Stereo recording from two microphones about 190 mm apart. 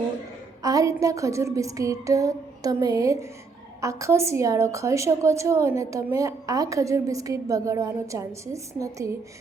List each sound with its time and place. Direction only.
0.6 s a woman's voice: 20° right (ahead or behind)